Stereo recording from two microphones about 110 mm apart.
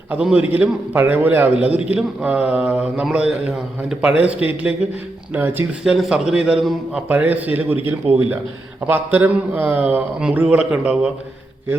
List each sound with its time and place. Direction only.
0.1 s a man's voice: 10° right (ahead or behind)
5.8 s a man's voice: 5° right (ahead or behind)
7.1 s a man's voice: 15° right (ahead or behind)